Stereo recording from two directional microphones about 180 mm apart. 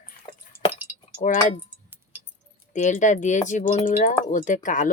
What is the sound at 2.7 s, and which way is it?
Speech, 40° left (ahead or behind).